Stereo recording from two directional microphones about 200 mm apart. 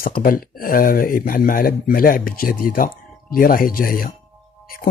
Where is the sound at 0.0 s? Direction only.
45° left (ahead or behind).